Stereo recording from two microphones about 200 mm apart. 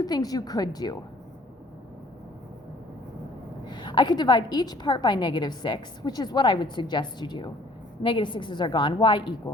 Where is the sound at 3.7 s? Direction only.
25° left (ahead or behind).